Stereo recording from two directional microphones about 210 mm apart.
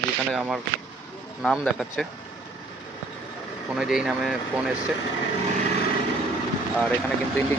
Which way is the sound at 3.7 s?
5° right (ahead or behind).